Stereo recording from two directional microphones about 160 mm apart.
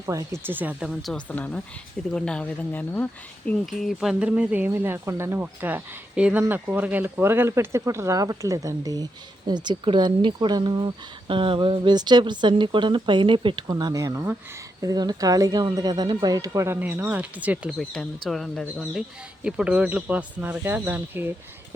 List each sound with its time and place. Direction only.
0.0 s speech: 20° right (ahead or behind); by 3.5 s 10° left (ahead or behind)
3.7 s speech: centre (ahead or behind)